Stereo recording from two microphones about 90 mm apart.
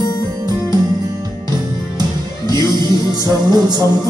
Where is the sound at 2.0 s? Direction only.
50° right (ahead or behind).